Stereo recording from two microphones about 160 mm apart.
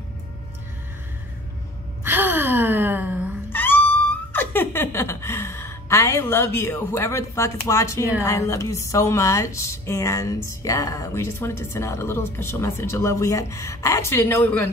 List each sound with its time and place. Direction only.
2.0 s gasp: 10° right (ahead or behind)
3.5 s a sound: 10° left (ahead or behind)
8.2 s speech: 20° left (ahead or behind)